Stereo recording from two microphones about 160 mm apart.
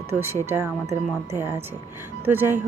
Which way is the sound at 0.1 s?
10° right (ahead or behind).